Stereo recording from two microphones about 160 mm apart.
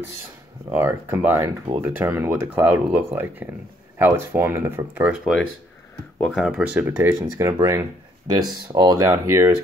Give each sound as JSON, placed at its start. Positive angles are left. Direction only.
{"t": 0.7, "sound": "speech", "side_deg": -10}